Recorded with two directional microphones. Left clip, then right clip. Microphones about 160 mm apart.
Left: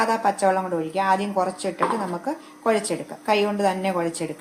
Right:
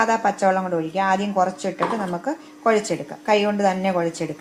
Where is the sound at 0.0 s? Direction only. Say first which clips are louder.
Right 2 dB; 30° right (ahead or behind).